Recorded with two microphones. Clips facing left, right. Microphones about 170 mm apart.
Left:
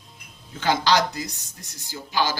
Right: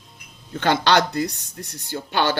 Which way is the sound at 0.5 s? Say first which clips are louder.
Right 3 dB; 65° right (ahead or behind).